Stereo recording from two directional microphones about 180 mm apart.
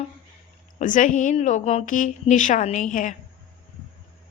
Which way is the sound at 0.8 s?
45° left (ahead or behind).